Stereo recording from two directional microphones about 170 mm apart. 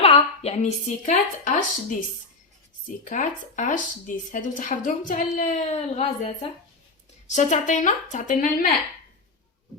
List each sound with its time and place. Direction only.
0.0 s a woman's voice: 35° left (ahead or behind)
3.0 s speech: 50° left (ahead or behind)